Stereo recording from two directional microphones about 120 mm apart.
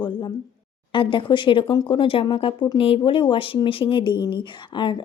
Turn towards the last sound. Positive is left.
turn(degrees=40)  # may be behind; listen again after turning